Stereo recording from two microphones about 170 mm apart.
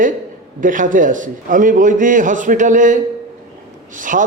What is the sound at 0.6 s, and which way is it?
A man's voice, 50° right (ahead or behind).